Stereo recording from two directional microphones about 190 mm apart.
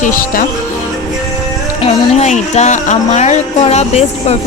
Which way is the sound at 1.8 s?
35° left (ahead or behind).